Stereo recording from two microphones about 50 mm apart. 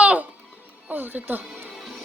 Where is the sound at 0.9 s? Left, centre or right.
Right.